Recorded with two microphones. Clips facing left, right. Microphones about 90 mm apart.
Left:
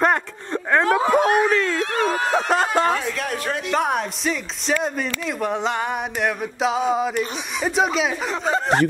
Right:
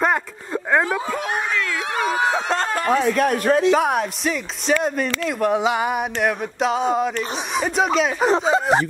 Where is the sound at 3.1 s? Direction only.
45° right (ahead or behind).